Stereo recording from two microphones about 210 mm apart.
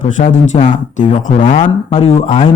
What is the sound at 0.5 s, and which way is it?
A man's voice, 35° left (ahead or behind).